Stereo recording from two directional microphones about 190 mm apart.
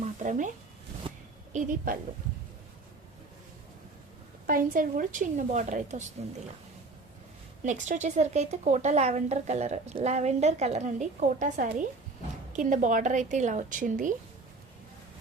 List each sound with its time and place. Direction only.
0.0 s a sound: 40° right (ahead or behind)
1.5 s a woman's voice: 45° right (ahead or behind)
4.4 s a woman's voice: 45° right (ahead or behind)
7.6 s a woman's voice: 40° right (ahead or behind)